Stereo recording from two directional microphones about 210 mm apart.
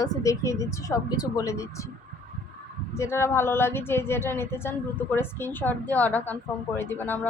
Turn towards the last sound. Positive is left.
turn(degrees=10)  # may be behind; listen again after turning